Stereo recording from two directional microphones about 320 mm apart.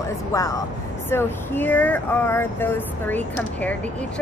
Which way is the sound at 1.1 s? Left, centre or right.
Centre.